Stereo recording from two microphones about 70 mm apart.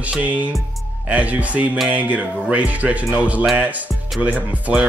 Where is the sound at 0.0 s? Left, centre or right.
Right.